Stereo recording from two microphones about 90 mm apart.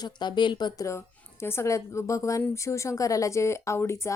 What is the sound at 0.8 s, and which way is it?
A woman's voice, 30° left (ahead or behind).